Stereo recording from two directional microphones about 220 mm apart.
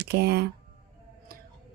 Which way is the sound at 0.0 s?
50° right (ahead or behind).